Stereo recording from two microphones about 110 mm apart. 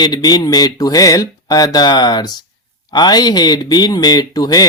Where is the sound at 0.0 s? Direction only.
40° left (ahead or behind).